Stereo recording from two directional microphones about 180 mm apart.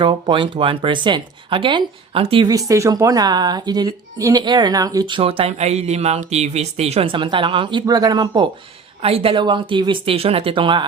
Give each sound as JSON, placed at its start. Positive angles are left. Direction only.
{"t": 0.0, "sound": "speech", "side_deg": -25}